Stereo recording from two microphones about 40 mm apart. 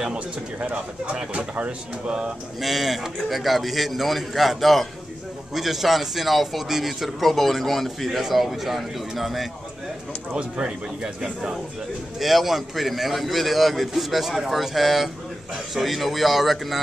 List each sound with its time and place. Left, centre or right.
0.0 s a man's voice: right
2.0 s a man's voice: right
2.6 s a man's voice: centre
10.3 s a man's voice: centre
12.2 s a man's voice: centre